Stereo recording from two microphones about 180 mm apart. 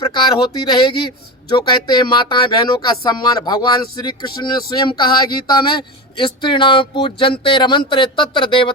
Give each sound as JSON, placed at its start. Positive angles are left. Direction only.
{"t": 0.3, "sound": "speech", "side_deg": 25}